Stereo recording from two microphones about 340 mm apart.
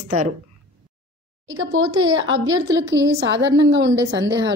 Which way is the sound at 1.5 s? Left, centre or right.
Right.